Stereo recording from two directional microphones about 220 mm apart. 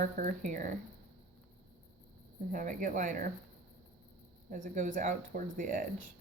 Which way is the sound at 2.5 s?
35° right (ahead or behind).